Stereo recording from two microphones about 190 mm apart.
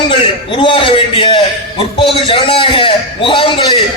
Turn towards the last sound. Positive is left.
turn(degrees=25)  # may be behind; listen again after turning